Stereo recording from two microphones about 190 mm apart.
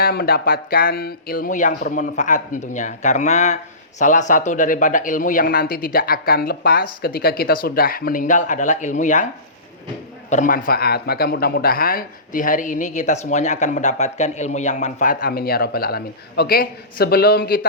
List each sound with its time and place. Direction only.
0.0 s speech: 50° left (ahead or behind)
10.2 s speech: 40° left (ahead or behind)